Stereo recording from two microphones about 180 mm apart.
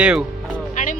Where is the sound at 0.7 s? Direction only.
45° left (ahead or behind).